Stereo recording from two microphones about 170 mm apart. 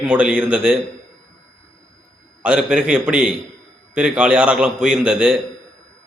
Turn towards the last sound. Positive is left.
turn(degrees=-5)  # may be behind; listen again after turning